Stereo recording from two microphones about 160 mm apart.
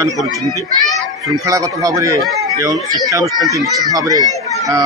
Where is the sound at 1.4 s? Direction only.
20° right (ahead or behind).